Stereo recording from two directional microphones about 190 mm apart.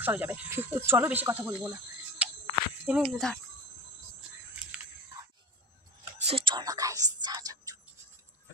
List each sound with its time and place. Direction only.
0.0 s speech: 10° right (ahead or behind)
2.2 s a sound: 5° right (ahead or behind)
2.8 s speech: 5° right (ahead or behind)
6.2 s music: 25° right (ahead or behind)